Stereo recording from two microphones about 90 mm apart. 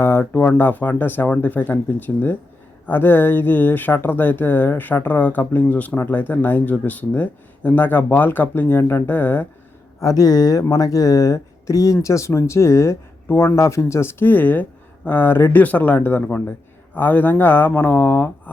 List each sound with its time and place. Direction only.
0.0 s speech: 25° left (ahead or behind)
8.8 s speech: 30° left (ahead or behind)
9.0 s speech: 20° left (ahead or behind)
10.0 s speech: 40° left (ahead or behind); by 18.5 s 20° left (ahead or behind)